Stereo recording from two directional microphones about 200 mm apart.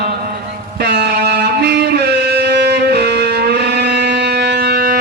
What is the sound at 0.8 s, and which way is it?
Music, 55° right (ahead or behind).